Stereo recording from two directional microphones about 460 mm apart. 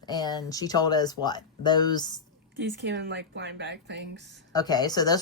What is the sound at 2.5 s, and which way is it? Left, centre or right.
Speech, right.